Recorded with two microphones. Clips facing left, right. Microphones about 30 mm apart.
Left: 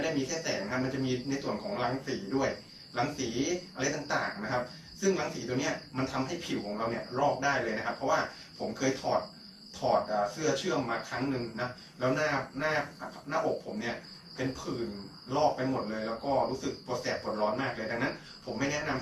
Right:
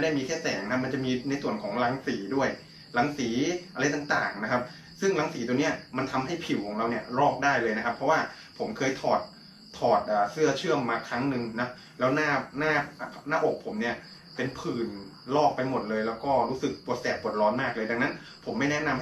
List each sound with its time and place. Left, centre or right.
0.0 s speech: right
7.7 s speech: centre
14.7 s speech: centre